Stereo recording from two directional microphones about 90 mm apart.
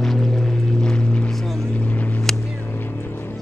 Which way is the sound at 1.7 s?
15° left (ahead or behind).